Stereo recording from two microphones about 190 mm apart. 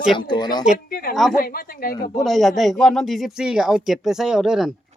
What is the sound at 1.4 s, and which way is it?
Speech, 50° left (ahead or behind).